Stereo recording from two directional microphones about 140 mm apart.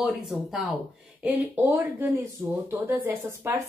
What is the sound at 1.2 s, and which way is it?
Speech, 15° right (ahead or behind).